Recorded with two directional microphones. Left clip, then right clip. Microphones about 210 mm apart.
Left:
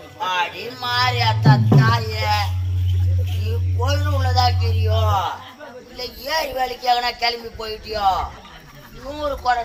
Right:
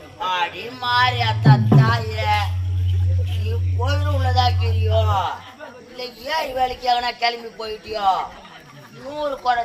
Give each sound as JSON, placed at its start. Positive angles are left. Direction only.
{"t": 0.2, "sound": "music", "side_deg": 15}
{"t": 3.8, "sound": "music", "side_deg": 15}
{"t": 6.0, "sound": "speech", "side_deg": 15}